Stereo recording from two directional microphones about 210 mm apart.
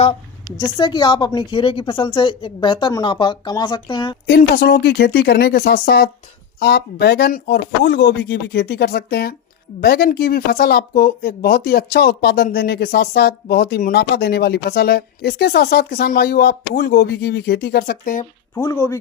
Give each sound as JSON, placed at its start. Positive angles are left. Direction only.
{"t": 0.0, "sound": "a woman's voice", "side_deg": 20}
{"t": 4.3, "sound": "speech", "side_deg": 50}
{"t": 18.5, "sound": "speech", "side_deg": 15}